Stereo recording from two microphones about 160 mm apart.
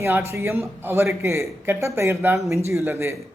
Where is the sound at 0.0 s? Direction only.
15° right (ahead or behind).